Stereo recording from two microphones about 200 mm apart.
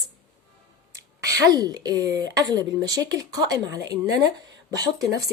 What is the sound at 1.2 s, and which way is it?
Speech, 15° right (ahead or behind).